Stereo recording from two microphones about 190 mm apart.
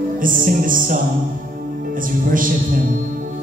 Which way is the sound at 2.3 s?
45° right (ahead or behind).